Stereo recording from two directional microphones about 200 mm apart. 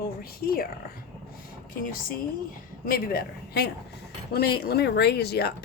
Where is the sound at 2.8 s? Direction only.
50° left (ahead or behind).